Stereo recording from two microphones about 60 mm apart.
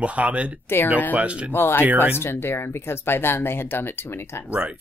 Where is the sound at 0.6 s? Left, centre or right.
Left.